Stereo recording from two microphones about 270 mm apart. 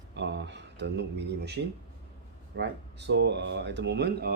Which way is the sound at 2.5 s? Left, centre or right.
Right.